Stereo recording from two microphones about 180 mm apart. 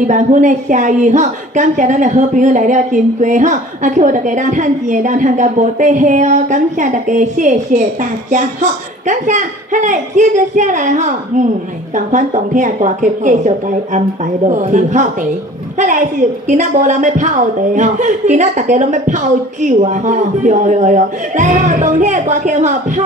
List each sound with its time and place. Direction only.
0.0 s a woman's voice: 45° right (ahead or behind)
16.4 s a woman's voice: 40° right (ahead or behind)